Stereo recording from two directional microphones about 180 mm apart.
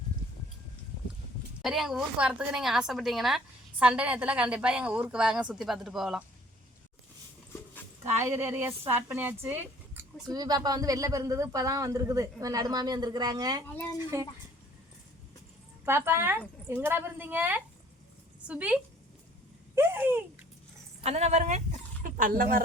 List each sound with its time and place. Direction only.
1.6 s a woman's voice: centre (ahead or behind)
8.0 s a woman's voice: 15° right (ahead or behind)
15.9 s a woman's voice: 15° right (ahead or behind)
21.0 s speech: 35° right (ahead or behind)